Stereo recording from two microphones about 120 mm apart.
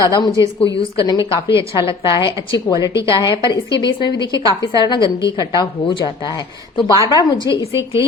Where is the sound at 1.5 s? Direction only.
45° left (ahead or behind).